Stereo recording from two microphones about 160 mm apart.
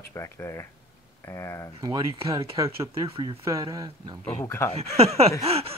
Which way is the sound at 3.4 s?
20° right (ahead or behind).